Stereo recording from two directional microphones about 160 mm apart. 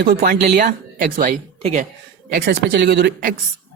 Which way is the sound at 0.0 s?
65° right (ahead or behind).